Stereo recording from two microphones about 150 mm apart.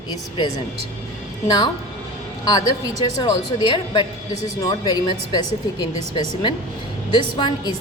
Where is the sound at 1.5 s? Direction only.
30° left (ahead or behind).